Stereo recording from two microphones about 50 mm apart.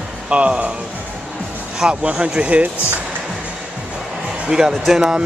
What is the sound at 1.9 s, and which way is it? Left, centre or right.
Speech, right.